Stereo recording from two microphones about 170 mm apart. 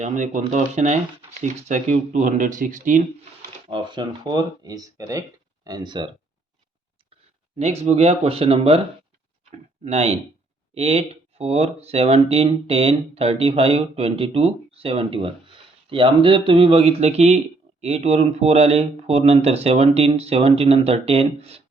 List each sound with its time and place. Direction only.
0.0 s speech: 45° right (ahead or behind)
3.7 s speech: 25° right (ahead or behind)
7.6 s speech: 40° right (ahead or behind)
9.8 s speech: 40° right (ahead or behind)